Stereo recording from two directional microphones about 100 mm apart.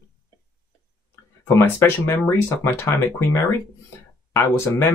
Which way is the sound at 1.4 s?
30° left (ahead or behind).